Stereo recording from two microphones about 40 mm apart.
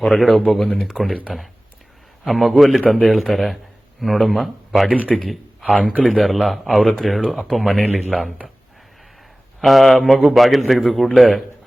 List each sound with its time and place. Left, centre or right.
0.0 s a man's voice: centre
0.9 s speech: right
2.2 s a man's voice: centre
9.6 s a man's voice: centre